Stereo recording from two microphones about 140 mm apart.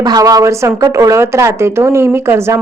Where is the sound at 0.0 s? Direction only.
25° right (ahead or behind).